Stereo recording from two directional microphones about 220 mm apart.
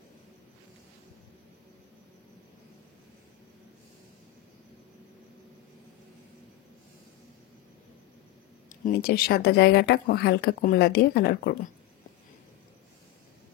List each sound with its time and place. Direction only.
8.6 s speech: 40° left (ahead or behind)